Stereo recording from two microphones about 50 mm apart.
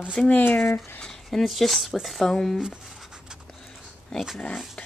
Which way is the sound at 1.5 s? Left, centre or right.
Centre.